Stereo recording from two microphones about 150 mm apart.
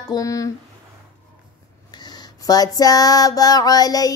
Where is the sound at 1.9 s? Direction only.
25° left (ahead or behind).